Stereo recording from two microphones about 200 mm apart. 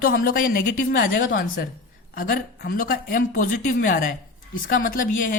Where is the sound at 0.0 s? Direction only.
45° left (ahead or behind).